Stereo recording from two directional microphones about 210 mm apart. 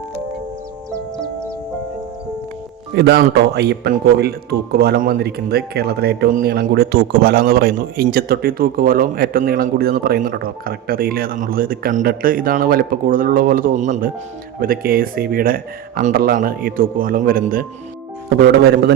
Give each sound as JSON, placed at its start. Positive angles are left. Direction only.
{"t": 2.9, "sound": "speech", "side_deg": -50}
{"t": 18.6, "sound": "speech", "side_deg": -55}